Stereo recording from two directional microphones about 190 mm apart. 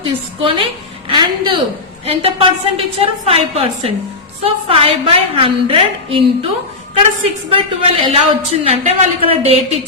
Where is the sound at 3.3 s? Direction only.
30° right (ahead or behind).